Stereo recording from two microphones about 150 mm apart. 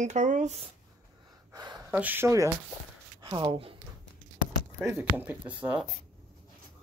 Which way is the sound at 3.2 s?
30° right (ahead or behind).